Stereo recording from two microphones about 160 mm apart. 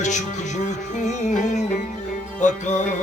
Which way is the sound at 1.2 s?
50° left (ahead or behind).